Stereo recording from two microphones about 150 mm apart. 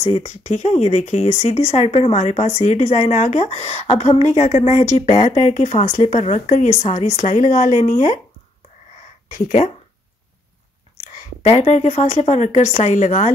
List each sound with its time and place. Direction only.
0.0 s a woman's voice: 50° left (ahead or behind)
9.3 s speech: 65° left (ahead or behind)
11.4 s a woman's voice: 50° left (ahead or behind)